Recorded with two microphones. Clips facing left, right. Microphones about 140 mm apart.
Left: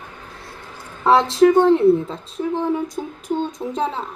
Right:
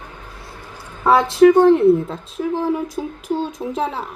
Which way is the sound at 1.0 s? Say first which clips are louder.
Right 2 dB; centre (ahead or behind).